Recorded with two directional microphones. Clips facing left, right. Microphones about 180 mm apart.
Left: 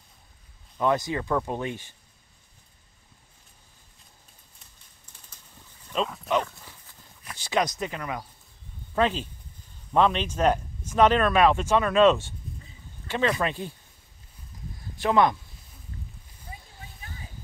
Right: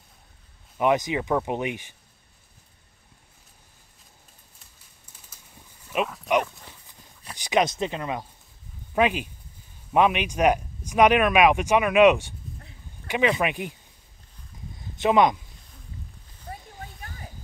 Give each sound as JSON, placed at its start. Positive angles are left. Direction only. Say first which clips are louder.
{"t": 0.7, "sound": "speech", "louder": "right 2 dB", "side_deg": -15}
{"t": 6.2, "sound": "livestock", "louder": "right 3 dB", "side_deg": -15}
{"t": 7.3, "sound": "speech", "louder": "right 3 dB", "side_deg": -20}
{"t": 8.9, "sound": "speech", "louder": "right 2 dB", "side_deg": -15}
{"t": 12.5, "sound": "a sound", "louder": "even", "side_deg": -70}
{"t": 13.1, "sound": "speech", "louder": "right 2 dB", "side_deg": -15}
{"t": 14.8, "sound": "speech", "louder": "right 2 dB", "side_deg": -20}